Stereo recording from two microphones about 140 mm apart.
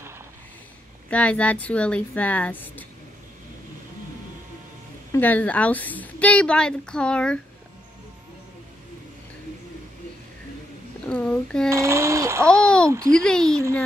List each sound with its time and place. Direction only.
1.1 s a woman's voice: 10° left (ahead or behind)
5.1 s a woman's voice: 15° left (ahead or behind)
11.1 s a woman's voice: 10° left (ahead or behind)
11.7 s a child's voice: 20° right (ahead or behind)
12.6 s a woman's voice: 5° left (ahead or behind)